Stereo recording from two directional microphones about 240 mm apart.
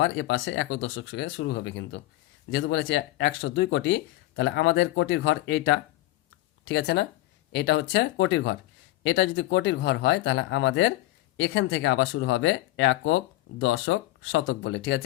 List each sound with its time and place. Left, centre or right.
0.0 s speech: left